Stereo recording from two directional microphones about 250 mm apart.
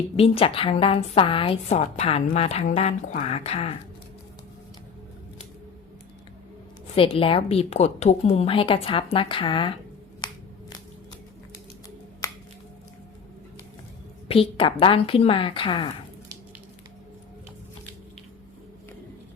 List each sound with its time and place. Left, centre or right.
0.2 s a woman's voice: left
6.9 s a woman's voice: left
14.3 s a woman's voice: left